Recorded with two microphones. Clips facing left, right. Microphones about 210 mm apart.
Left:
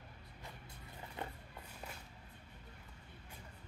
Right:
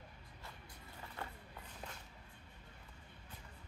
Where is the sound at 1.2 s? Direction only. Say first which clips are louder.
Left 3 dB; 20° left (ahead or behind).